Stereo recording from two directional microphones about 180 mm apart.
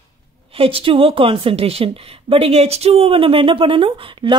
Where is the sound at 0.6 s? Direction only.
30° right (ahead or behind).